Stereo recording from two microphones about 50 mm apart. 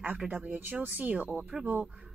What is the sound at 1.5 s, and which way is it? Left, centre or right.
Speech, right.